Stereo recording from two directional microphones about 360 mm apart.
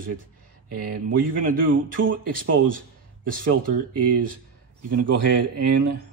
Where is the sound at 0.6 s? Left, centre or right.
Right.